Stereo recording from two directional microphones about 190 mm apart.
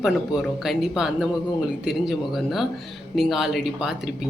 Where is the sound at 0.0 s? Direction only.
Centre (ahead or behind).